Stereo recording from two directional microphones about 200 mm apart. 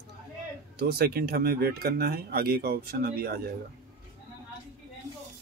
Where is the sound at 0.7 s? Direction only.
50° right (ahead or behind).